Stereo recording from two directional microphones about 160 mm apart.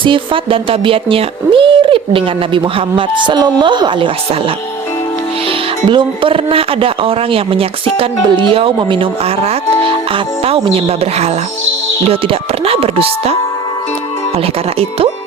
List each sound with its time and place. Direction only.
0.0 s speech: 30° right (ahead or behind)
14.3 s speech: 35° right (ahead or behind)